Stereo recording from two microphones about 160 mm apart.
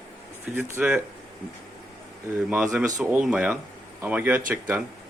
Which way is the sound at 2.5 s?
5° right (ahead or behind).